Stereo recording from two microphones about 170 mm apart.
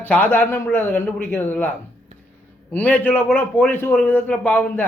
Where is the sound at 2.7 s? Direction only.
10° left (ahead or behind).